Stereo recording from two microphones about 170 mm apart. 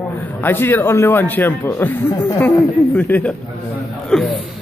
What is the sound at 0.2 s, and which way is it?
A man's voice, 10° left (ahead or behind).